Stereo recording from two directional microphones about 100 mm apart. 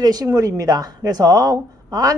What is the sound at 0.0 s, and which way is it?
Speech, 35° right (ahead or behind).